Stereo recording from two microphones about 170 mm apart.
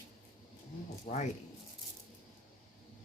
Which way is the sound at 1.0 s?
40° left (ahead or behind).